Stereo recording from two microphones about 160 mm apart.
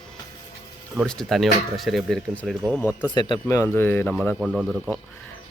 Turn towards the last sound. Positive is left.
turn(degrees=0)  # may be behind; listen again after turning